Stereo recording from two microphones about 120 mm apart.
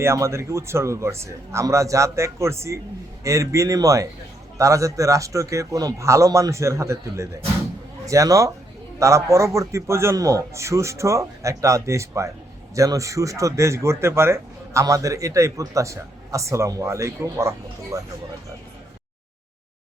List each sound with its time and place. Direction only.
0.0 s speech: 25° right (ahead or behind)